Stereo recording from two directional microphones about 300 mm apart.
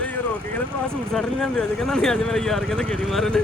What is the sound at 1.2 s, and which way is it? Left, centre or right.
Speech, centre.